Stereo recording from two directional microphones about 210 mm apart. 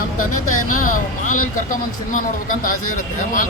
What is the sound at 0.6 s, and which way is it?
Speech, 40° left (ahead or behind).